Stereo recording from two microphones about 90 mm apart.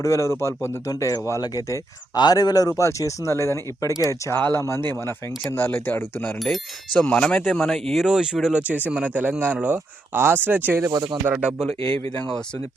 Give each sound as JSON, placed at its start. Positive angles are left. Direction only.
{"t": 0.0, "sound": "speech", "side_deg": 35}
{"t": 0.9, "sound": "speech", "side_deg": 40}
{"t": 4.4, "sound": "speech", "side_deg": 15}
{"t": 7.0, "sound": "speech", "side_deg": 10}
{"t": 8.0, "sound": "speech", "side_deg": -10}
{"t": 10.9, "sound": "speech", "side_deg": -50}
{"t": 11.3, "sound": "speech", "side_deg": -10}